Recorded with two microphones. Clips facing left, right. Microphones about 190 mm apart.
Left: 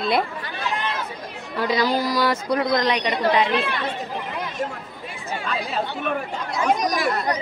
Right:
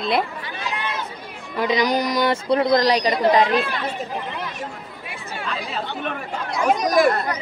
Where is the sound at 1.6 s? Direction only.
20° right (ahead or behind); by 3.1 s 35° right (ahead or behind).